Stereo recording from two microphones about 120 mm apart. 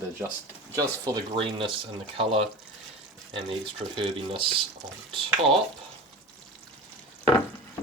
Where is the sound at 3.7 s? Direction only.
45° right (ahead or behind).